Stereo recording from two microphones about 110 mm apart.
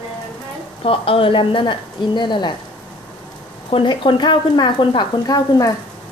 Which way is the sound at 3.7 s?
45° left (ahead or behind).